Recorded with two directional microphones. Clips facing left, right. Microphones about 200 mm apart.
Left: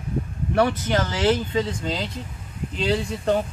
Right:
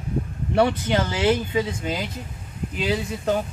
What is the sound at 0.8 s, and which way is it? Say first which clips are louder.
Speech: even; 15° right (ahead or behind).